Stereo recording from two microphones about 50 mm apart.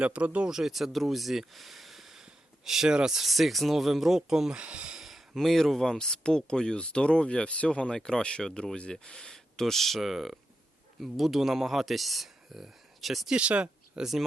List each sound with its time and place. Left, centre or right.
0.0 s speech: right
0.5 s speech: centre
4.6 s speech: right
4.9 s speech: centre
13.3 s speech: right
14.0 s speech: centre